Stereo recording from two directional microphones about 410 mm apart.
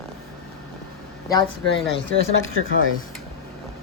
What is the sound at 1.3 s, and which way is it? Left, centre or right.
Speech, centre.